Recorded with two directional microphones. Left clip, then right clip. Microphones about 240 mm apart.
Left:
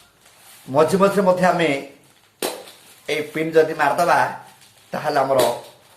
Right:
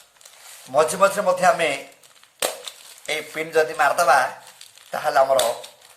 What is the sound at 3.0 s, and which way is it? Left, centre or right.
Speech, right.